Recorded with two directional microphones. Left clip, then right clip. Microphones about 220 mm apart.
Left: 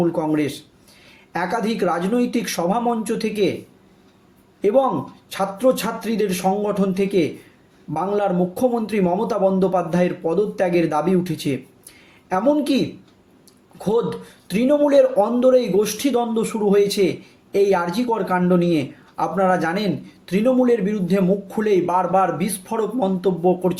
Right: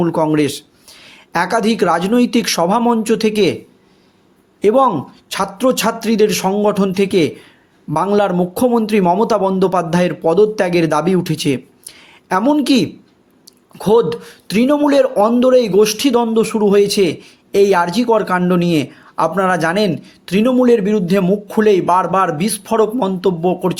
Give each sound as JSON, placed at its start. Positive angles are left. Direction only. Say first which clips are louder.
{"t": 0.0, "sound": "speech", "louder": "right 6 dB", "side_deg": -40}
{"t": 4.6, "sound": "speech", "louder": "right 5 dB", "side_deg": -45}